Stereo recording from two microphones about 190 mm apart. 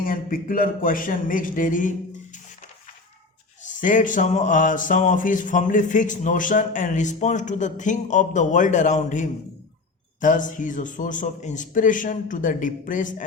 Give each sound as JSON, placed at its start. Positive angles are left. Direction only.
{"t": 0.0, "sound": "a man's voice", "side_deg": 45}
{"t": 3.6, "sound": "a man's voice", "side_deg": 45}